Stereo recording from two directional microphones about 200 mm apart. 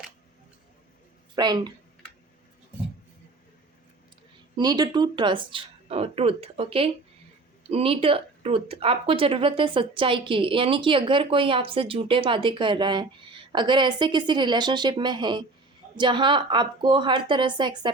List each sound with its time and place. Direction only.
1.4 s a woman's voice: 20° right (ahead or behind)
4.5 s a woman's voice: 20° right (ahead or behind)